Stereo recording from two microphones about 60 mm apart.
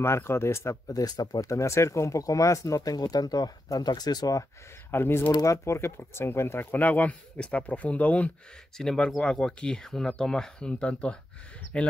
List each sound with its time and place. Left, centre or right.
0.0 s speech: left
0.8 s speech: left
4.9 s speech: left
5.4 s speech: left
5.8 s speech: left
8.7 s speech: centre